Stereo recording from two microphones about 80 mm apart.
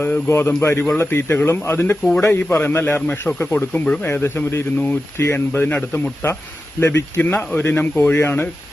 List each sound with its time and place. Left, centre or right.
0.0 s a man's voice: left
3.7 s speech: centre
4.0 s speech: left